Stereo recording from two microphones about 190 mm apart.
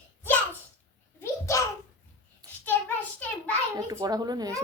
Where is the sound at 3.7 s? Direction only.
20° right (ahead or behind).